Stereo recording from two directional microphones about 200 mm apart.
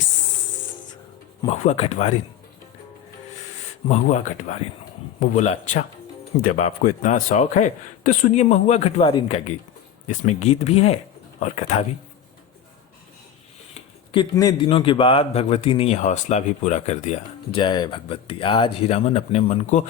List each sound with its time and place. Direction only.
1.5 s a man's voice: 30° left (ahead or behind)
3.8 s a man's voice: 35° left (ahead or behind)
13.7 s a man's voice: 25° left (ahead or behind)
17.6 s a man's voice: 20° left (ahead or behind)